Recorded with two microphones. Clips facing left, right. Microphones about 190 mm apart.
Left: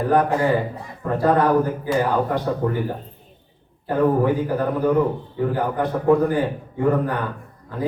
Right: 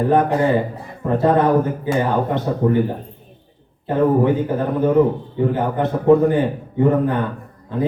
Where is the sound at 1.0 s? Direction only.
20° right (ahead or behind).